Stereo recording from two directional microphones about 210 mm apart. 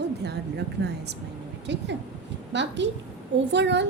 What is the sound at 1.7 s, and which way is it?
A woman's voice, 55° right (ahead or behind).